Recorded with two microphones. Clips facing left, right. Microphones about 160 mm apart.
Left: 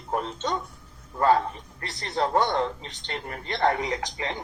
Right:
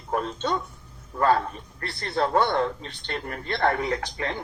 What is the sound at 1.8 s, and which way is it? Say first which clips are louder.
Speech: right 1 dB; 15° left (ahead or behind).